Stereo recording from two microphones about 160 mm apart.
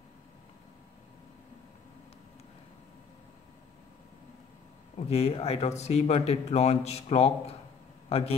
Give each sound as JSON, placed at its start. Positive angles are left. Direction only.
{"t": 4.9, "sound": "a man's voice", "side_deg": 40}